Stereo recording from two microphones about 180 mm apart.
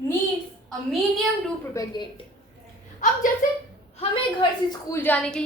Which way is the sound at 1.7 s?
20° left (ahead or behind).